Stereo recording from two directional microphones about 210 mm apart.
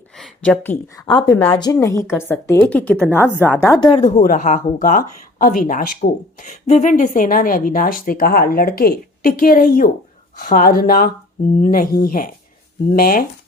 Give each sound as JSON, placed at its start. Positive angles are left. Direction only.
{"t": 0.2, "sound": "a woman's voice", "side_deg": 5}
{"t": 1.0, "sound": "a woman's voice", "side_deg": 25}
{"t": 3.6, "sound": "speech", "side_deg": 20}
{"t": 4.2, "sound": "speech", "side_deg": 40}